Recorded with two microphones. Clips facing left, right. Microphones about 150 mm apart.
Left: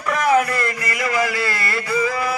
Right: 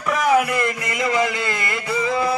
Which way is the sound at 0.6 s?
20° right (ahead or behind).